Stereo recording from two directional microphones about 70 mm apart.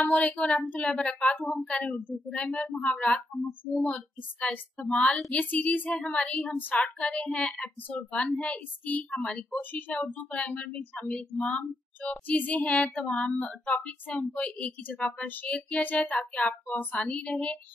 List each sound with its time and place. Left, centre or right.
0.0 s a woman's voice: left